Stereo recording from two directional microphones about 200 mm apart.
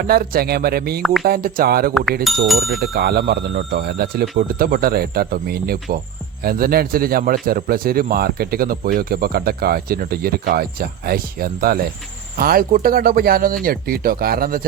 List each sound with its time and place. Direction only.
0.1 s a man's voice: 50° right (ahead or behind)
1.9 s speech: centre (ahead or behind)
2.8 s a man's voice: 50° right (ahead or behind)